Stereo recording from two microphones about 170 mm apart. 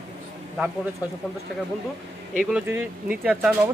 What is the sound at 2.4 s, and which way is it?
Speech, 10° right (ahead or behind).